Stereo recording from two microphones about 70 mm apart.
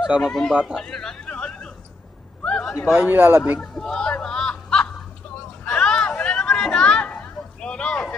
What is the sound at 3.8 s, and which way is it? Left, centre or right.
Speech, centre.